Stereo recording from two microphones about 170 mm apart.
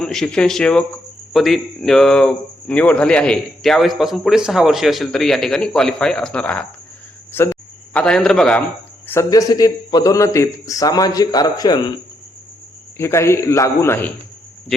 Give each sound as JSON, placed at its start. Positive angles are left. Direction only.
{"t": 0.0, "sound": "a man's voice", "side_deg": 5}
{"t": 9.0, "sound": "a man's voice", "side_deg": 15}
{"t": 13.0, "sound": "a man's voice", "side_deg": 15}
{"t": 14.7, "sound": "speech", "side_deg": 0}